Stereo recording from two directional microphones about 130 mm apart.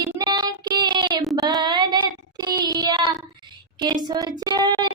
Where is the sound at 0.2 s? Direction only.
35° right (ahead or behind).